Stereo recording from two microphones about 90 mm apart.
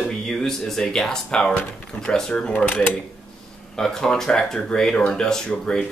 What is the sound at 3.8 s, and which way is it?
Speech, 5° left (ahead or behind).